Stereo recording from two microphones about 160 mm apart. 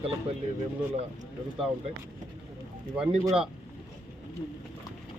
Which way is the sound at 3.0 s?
5° right (ahead or behind).